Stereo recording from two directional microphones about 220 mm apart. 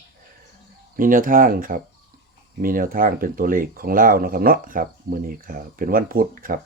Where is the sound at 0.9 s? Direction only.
40° right (ahead or behind).